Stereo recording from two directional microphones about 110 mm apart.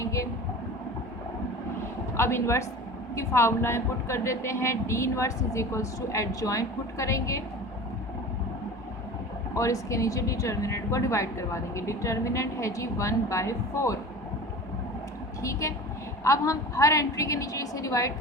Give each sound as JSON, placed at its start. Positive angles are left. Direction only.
{"t": 0.0, "sound": "a sound", "side_deg": 30}
{"t": 2.1, "sound": "a woman's voice", "side_deg": 25}
{"t": 9.6, "sound": "a woman's voice", "side_deg": 30}
{"t": 15.4, "sound": "a woman's voice", "side_deg": 30}